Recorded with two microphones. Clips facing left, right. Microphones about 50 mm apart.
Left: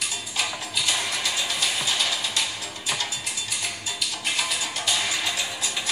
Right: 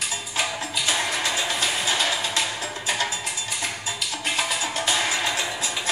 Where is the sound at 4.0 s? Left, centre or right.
Centre.